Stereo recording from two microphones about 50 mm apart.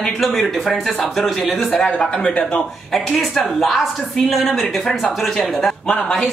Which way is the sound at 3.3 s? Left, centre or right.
Centre.